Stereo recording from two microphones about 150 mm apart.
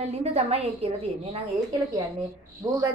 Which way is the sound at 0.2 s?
45° right (ahead or behind).